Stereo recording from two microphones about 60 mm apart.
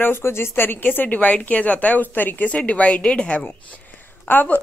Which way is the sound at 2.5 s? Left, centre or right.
Left.